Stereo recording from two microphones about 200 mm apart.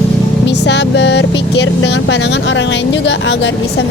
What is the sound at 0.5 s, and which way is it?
A woman's voice, 60° left (ahead or behind).